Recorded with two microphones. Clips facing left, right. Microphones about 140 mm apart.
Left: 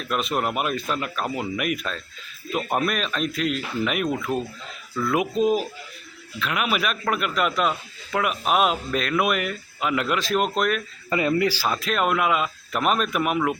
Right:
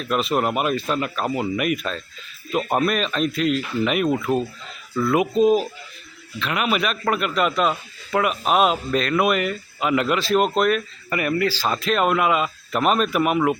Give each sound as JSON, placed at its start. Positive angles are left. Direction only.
{"t": 0.0, "sound": "a man's voice", "side_deg": 0}
{"t": 11.1, "sound": "speech", "side_deg": 20}
{"t": 11.7, "sound": "a man's voice", "side_deg": 0}